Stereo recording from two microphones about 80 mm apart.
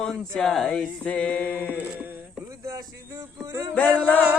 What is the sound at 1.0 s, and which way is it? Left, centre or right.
Music, centre.